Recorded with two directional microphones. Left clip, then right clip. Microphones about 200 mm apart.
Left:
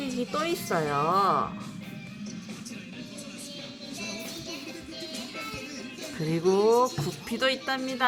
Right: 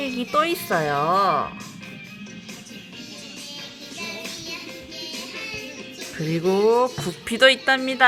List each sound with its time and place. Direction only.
0.3 s speech: 10° right (ahead or behind)
6.1 s speech: 5° right (ahead or behind); by 8.0 s 25° right (ahead or behind)